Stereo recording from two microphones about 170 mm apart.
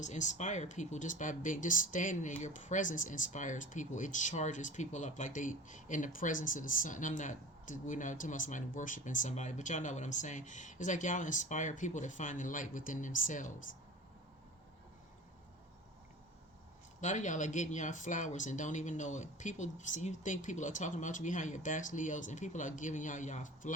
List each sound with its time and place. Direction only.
0.0 s speech: 45° left (ahead or behind)
17.0 s speech: 45° left (ahead or behind)